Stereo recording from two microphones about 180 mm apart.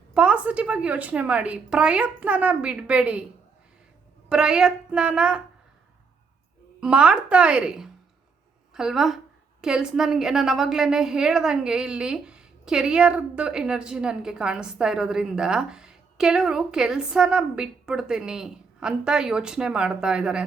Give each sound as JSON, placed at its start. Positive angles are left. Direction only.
{"t": 0.1, "sound": "a woman's voice", "side_deg": -5}
{"t": 4.3, "sound": "a woman's voice", "side_deg": -5}
{"t": 6.7, "sound": "a woman's voice", "side_deg": -5}